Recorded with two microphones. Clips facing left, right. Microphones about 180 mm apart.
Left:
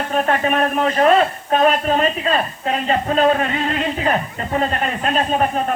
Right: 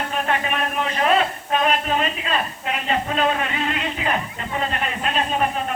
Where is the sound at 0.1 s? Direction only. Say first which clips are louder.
Left 9 dB; 40° left (ahead or behind).